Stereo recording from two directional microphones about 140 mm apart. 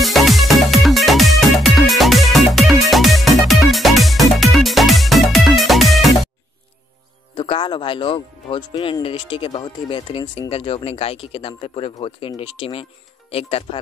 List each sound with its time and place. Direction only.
0.0 s music: centre (ahead or behind)
7.3 s speech: 35° left (ahead or behind)